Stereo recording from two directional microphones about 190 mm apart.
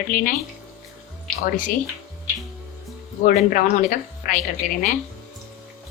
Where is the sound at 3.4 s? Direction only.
45° left (ahead or behind).